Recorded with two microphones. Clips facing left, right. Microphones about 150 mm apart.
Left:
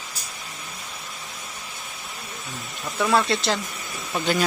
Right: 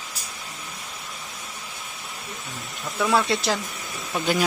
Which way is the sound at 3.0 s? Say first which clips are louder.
Left 1 dB; 5° right (ahead or behind).